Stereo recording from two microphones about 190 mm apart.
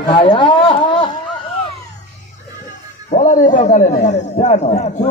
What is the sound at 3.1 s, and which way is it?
A man's voice, 45° left (ahead or behind).